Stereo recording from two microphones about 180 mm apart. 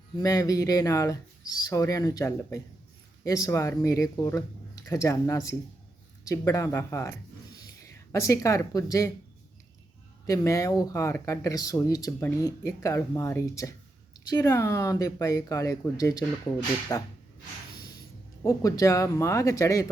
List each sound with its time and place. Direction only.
0.2 s speech: 20° left (ahead or behind)
10.2 s speech: 20° left (ahead or behind)
18.4 s speech: 15° left (ahead or behind)